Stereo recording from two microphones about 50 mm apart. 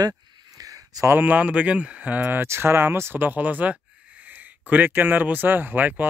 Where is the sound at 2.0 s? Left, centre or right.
Right.